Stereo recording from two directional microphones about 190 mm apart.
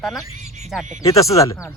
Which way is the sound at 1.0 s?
15° left (ahead or behind).